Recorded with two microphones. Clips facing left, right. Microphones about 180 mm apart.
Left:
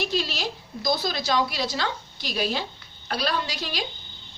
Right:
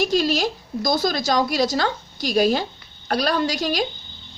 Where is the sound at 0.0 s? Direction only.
45° right (ahead or behind).